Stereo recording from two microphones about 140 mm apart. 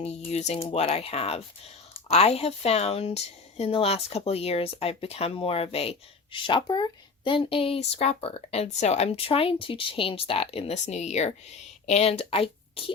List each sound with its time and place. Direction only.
0.0 s a woman's voice: 50° left (ahead or behind)